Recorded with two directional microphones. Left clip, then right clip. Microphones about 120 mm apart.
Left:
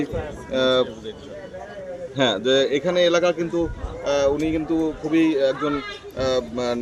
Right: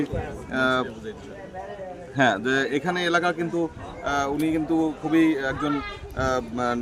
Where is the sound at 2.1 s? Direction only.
40° right (ahead or behind).